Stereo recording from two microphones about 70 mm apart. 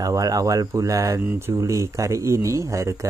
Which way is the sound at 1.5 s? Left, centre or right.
Right.